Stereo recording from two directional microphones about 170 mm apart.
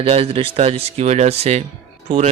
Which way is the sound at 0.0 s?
35° right (ahead or behind).